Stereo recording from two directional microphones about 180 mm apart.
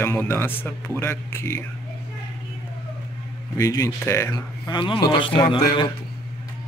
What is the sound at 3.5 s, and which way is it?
A man's voice, 20° left (ahead or behind).